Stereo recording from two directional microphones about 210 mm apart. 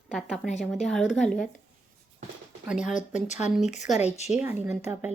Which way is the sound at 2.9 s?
35° left (ahead or behind).